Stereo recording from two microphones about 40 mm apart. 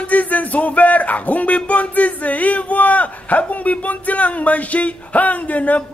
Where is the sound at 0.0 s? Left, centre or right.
Left.